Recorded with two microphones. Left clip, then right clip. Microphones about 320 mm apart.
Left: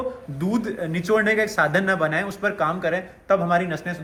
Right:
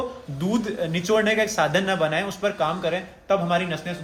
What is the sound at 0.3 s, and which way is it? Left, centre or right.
A man's voice, centre.